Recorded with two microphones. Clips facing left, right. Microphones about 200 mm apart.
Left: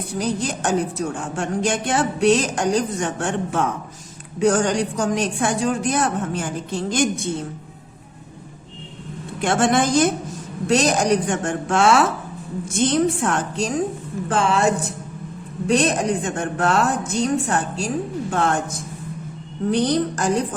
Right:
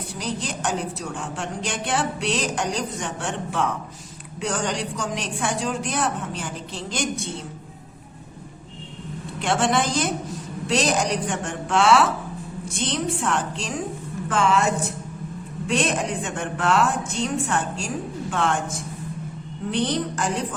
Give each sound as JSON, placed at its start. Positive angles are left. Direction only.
{"t": 0.2, "sound": "a woman's voice", "side_deg": 45}
{"t": 9.4, "sound": "a woman's voice", "side_deg": 50}
{"t": 14.3, "sound": "a woman's voice", "side_deg": 35}
{"t": 19.7, "sound": "a woman's voice", "side_deg": 40}